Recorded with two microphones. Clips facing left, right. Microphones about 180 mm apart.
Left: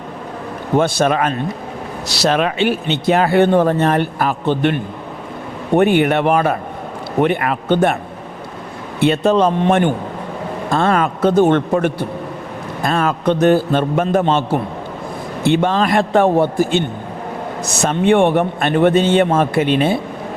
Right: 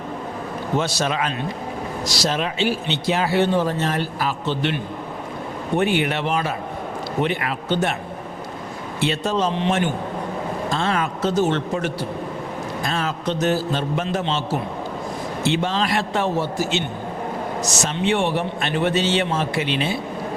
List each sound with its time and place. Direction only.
0.8 s a man's voice: 55° left (ahead or behind)
2.0 s speech: 65° left (ahead or behind)
9.0 s a man's voice: 60° left (ahead or behind)